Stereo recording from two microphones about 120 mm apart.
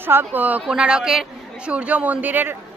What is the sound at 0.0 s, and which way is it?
A man's voice, 15° right (ahead or behind).